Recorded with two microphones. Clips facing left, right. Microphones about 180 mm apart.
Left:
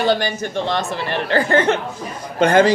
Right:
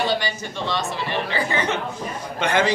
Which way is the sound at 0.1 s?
50° left (ahead or behind).